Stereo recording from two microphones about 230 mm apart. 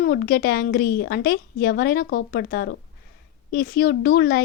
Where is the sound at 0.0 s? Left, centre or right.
Left.